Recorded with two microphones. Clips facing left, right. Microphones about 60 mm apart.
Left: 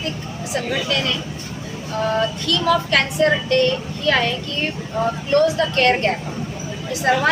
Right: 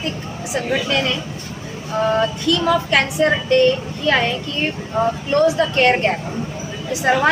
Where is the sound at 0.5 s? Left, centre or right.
Centre.